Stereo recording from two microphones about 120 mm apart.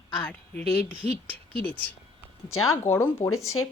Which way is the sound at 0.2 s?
10° left (ahead or behind).